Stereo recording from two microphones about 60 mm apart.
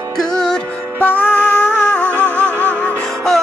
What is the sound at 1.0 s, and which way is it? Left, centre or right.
Music, left.